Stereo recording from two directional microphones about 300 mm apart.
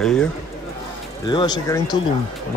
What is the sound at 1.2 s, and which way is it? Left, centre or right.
Speech, centre.